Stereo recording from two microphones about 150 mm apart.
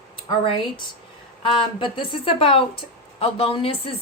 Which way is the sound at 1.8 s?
35° left (ahead or behind).